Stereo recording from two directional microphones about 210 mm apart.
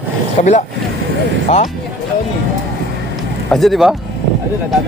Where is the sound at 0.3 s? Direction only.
35° left (ahead or behind).